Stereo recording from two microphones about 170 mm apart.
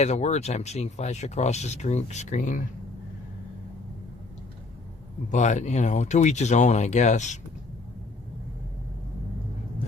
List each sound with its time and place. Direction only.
0.0 s speech: 40° left (ahead or behind)
5.3 s speech: 45° left (ahead or behind)